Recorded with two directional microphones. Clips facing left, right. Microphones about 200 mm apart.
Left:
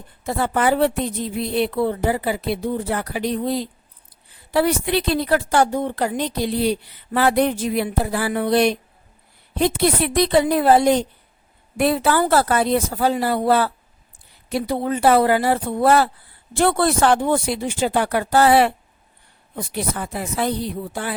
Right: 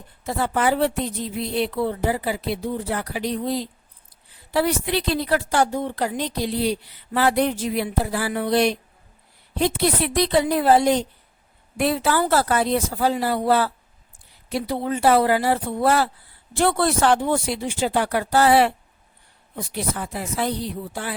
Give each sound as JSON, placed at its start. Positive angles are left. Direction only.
{"t": 0.3, "sound": "a woman's voice", "side_deg": 55}